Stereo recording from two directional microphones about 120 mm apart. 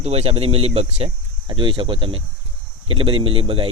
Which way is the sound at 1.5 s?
45° right (ahead or behind).